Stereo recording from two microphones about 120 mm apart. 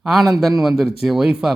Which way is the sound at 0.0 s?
Centre (ahead or behind).